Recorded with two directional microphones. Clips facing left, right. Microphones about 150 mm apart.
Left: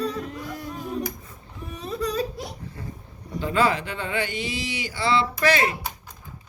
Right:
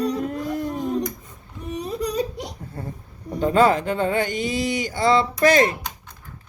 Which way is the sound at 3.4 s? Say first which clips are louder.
Right 5 dB; 45° right (ahead or behind).